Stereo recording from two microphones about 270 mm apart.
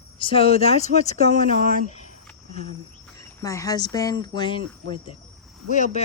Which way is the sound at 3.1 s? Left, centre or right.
Centre.